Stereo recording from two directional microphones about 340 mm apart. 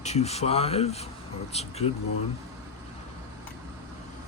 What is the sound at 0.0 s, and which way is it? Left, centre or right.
A man's voice, centre.